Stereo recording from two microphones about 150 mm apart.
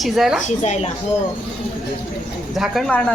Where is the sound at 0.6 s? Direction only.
50° left (ahead or behind).